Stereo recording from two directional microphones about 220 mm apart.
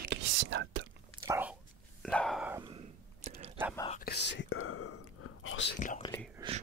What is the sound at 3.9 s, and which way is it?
Whispering, 45° left (ahead or behind).